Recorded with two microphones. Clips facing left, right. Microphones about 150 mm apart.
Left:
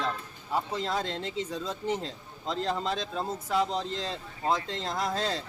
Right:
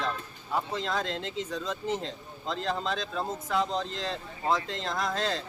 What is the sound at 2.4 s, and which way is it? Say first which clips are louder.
Speech: left 1 dB; 35° left (ahead or behind).